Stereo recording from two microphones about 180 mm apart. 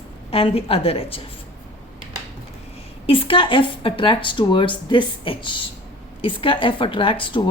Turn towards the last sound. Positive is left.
turn(degrees=25)  # may be behind; listen again after turning